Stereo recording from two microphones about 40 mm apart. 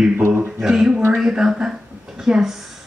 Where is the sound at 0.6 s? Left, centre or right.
Centre.